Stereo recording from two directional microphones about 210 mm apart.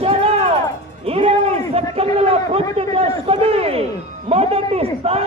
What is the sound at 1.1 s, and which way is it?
A man's voice, 30° right (ahead or behind).